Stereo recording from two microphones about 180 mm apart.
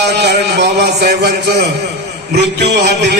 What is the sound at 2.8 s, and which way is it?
Music, 65° right (ahead or behind).